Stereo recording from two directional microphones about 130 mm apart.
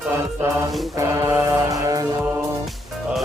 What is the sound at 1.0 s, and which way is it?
Music, 25° right (ahead or behind).